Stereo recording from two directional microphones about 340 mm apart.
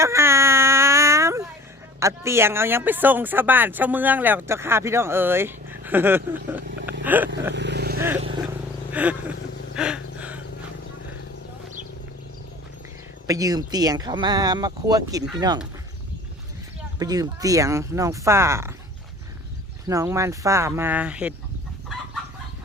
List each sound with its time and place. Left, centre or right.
0.0 s a sound: centre
2.0 s speech: centre
7.0 s vehicle: centre
7.5 s vehicle: right
7.9 s vehicle: centre
8.9 s a sound: centre
13.2 s speech: centre
17.0 s speech: centre
19.9 s speech: centre